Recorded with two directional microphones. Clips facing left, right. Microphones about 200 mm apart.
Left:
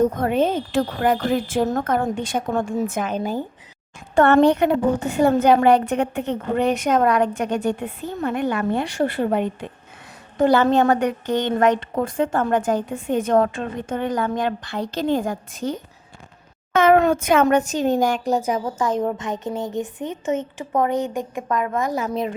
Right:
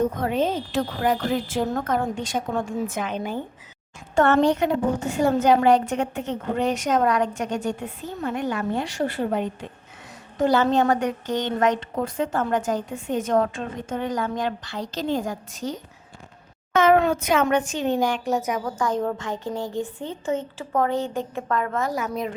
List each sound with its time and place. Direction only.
0.2 s a woman's voice: 55° left (ahead or behind)
4.1 s a woman's voice: 60° left (ahead or behind); by 22.4 s 25° left (ahead or behind)